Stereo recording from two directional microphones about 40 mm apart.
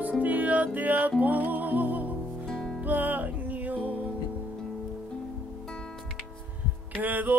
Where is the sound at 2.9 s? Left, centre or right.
Right.